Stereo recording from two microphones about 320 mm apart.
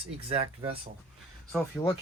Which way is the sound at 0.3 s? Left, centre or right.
Centre.